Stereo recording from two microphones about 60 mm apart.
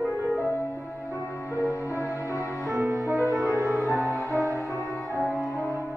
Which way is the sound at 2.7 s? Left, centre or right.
Right.